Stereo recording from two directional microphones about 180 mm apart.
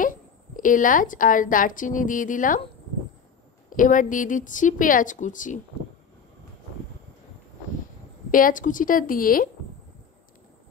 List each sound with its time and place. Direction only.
0.6 s a woman's voice: 50° left (ahead or behind)
3.7 s a woman's voice: 45° left (ahead or behind)
8.3 s a woman's voice: 50° left (ahead or behind)